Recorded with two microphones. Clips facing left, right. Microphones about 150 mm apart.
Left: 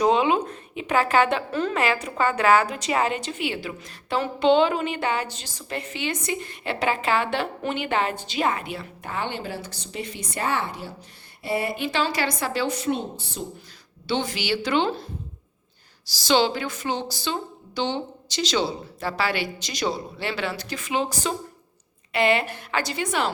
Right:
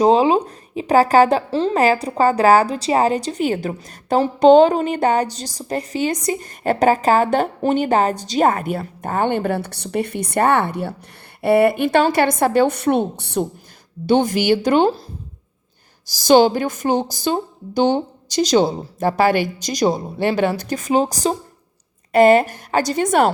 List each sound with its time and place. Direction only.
0.0 s a woman's voice: 35° right (ahead or behind); by 13.5 s 65° right (ahead or behind)
14.1 s a woman's voice: 45° right (ahead or behind)
16.1 s a woman's voice: 45° right (ahead or behind)